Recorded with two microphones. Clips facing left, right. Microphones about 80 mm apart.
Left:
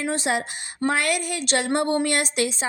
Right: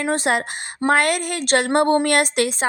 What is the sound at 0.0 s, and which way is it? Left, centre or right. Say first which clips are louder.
A woman's voice: right 4 dB; right.